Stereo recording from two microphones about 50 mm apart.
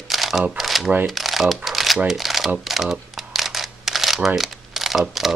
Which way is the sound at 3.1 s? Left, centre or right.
Centre.